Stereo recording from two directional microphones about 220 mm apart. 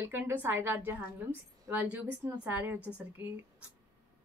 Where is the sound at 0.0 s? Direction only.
10° right (ahead or behind).